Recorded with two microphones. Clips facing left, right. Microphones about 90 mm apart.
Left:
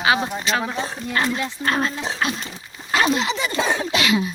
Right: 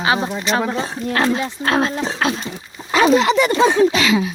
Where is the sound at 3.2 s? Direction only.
60° right (ahead or behind).